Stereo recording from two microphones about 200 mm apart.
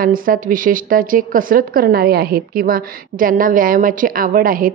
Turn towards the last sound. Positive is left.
turn(degrees=-45)  # may be behind; listen again after turning